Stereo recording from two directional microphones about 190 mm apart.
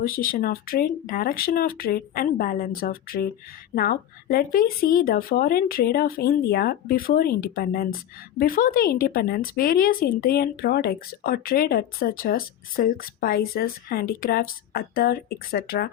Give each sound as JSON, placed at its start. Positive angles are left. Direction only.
{"t": 0.1, "sound": "speech", "side_deg": 50}